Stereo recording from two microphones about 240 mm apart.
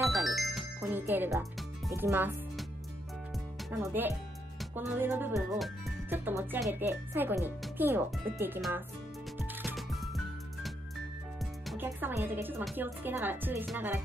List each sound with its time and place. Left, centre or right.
0.0 s music: centre
1.9 s speech: centre
3.9 s speech: centre
9.6 s music: centre
11.8 s speech: centre